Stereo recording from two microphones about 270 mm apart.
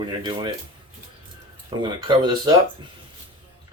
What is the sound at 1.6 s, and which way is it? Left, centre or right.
Speech, centre.